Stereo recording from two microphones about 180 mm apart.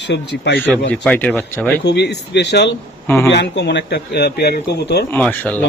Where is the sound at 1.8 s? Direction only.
70° left (ahead or behind).